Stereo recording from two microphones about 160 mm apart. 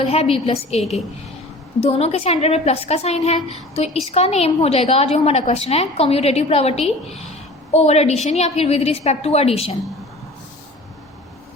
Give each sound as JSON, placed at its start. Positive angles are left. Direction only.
{"t": 0.0, "sound": "a woman's voice", "side_deg": 35}